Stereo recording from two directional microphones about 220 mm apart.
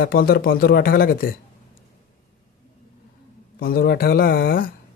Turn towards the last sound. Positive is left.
turn(degrees=40)  # may be behind; listen again after turning